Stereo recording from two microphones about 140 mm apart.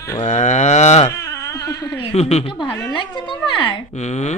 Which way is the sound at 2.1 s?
50° left (ahead or behind).